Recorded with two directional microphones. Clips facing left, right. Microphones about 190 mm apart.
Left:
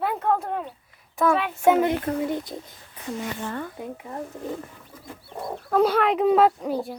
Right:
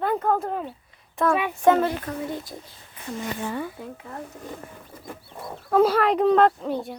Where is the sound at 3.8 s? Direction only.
20° left (ahead or behind).